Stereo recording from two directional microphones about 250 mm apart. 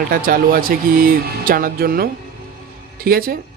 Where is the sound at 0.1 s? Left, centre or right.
Right.